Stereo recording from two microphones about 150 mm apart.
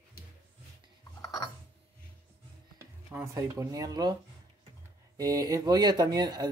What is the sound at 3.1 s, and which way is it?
Speech, 15° right (ahead or behind).